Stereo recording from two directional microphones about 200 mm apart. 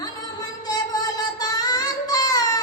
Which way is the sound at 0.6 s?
20° left (ahead or behind).